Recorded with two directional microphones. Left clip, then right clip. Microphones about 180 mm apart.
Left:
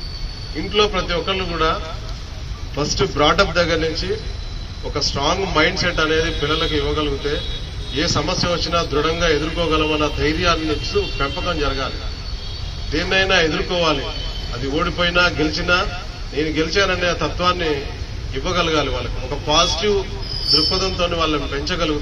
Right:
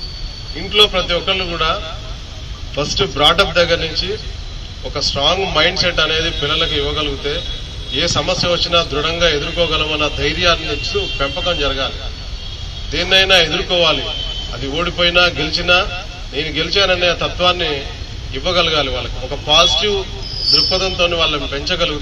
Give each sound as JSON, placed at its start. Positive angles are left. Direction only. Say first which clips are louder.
{"t": 0.7, "sound": "a man's voice", "louder": "right 5 dB", "side_deg": -30}
{"t": 3.0, "sound": "a man's voice", "louder": "right 3 dB", "side_deg": -25}
{"t": 5.1, "sound": "a man's voice", "louder": "right 4 dB", "side_deg": -30}
{"t": 12.9, "sound": "a man's voice", "louder": "right 5 dB", "side_deg": -30}